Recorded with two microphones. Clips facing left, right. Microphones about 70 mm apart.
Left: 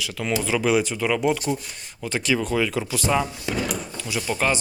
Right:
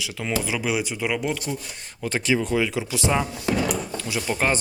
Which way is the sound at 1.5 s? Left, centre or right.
Centre.